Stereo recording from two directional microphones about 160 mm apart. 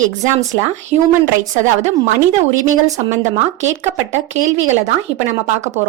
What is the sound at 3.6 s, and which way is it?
Speech, 45° right (ahead or behind).